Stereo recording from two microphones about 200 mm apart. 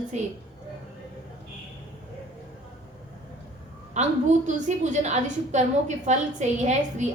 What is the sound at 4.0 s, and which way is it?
A woman's voice, 35° right (ahead or behind).